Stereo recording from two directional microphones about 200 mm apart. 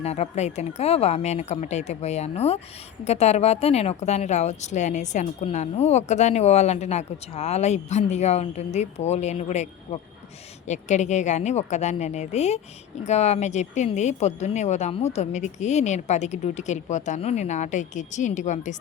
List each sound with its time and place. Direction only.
0.0 s a woman's voice: 30° left (ahead or behind)